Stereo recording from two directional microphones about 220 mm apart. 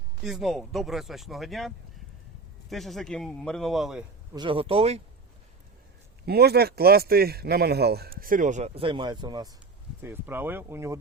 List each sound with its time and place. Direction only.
0.3 s speech: centre (ahead or behind)
4.4 s speech: 25° right (ahead or behind)
6.2 s a man's voice: 45° right (ahead or behind); by 11.0 s 10° right (ahead or behind)